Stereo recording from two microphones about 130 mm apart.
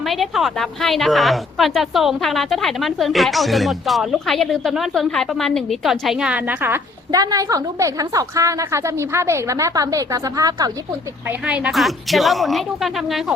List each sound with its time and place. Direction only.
0.0 s a woman's voice: centre (ahead or behind)
7.1 s a woman's voice: 30° right (ahead or behind)
11.3 s a woman's voice: 10° right (ahead or behind)